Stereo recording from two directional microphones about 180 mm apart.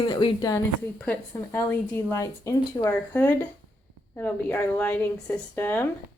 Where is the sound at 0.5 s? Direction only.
10° left (ahead or behind).